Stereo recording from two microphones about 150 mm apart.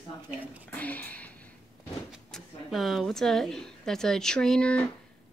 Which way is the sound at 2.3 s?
Centre (ahead or behind).